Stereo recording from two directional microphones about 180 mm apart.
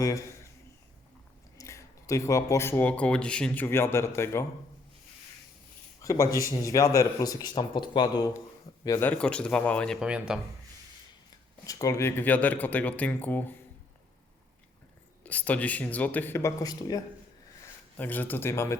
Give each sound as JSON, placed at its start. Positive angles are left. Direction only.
{"t": 0.0, "sound": "speech", "side_deg": 15}
{"t": 1.5, "sound": "speech", "side_deg": 15}
{"t": 6.0, "sound": "speech", "side_deg": 15}
{"t": 11.6, "sound": "speech", "side_deg": 20}
{"t": 15.2, "sound": "speech", "side_deg": 10}